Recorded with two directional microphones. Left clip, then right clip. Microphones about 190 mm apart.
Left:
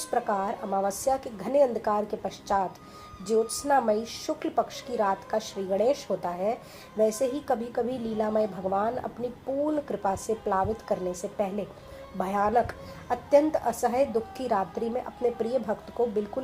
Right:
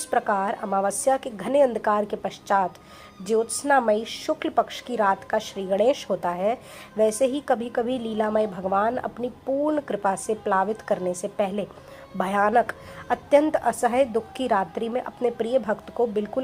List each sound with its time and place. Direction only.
0.1 s a woman's voice: 35° right (ahead or behind)
3.7 s a woman's voice: 35° right (ahead or behind)